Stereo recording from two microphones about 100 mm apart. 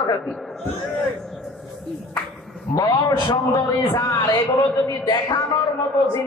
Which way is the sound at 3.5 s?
30° left (ahead or behind).